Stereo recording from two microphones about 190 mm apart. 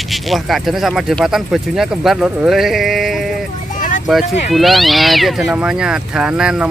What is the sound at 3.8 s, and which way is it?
Vehicle, 45° left (ahead or behind).